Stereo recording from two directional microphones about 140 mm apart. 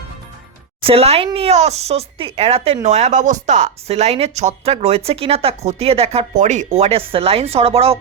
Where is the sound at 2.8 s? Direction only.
55° right (ahead or behind).